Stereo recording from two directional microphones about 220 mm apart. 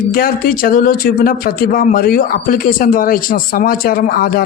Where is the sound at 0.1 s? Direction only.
40° left (ahead or behind).